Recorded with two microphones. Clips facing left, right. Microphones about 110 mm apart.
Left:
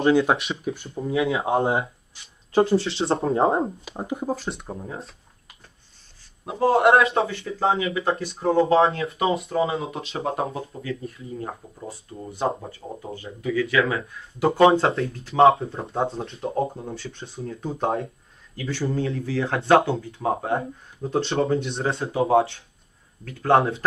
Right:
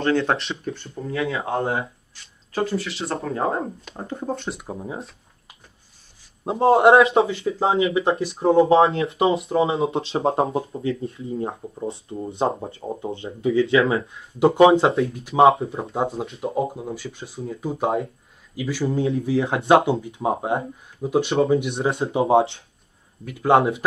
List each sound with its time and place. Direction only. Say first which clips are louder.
0.0 s speech: left 2 dB; 10° left (ahead or behind)
4.2 s speech: even; centre (ahead or behind)
6.4 s speech: right 3 dB; 30° right (ahead or behind)
15.1 s speech: right 1 dB; 15° right (ahead or behind)
15.6 s speech: right 1 dB; 5° right (ahead or behind)
21.9 s speech: right 1 dB; 25° right (ahead or behind)
23.2 s speech: right 2 dB; 15° right (ahead or behind)